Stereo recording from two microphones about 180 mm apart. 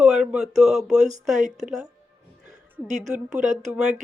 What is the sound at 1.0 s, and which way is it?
Speech, 40° right (ahead or behind).